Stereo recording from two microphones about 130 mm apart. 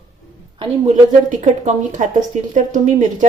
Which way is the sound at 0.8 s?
65° right (ahead or behind).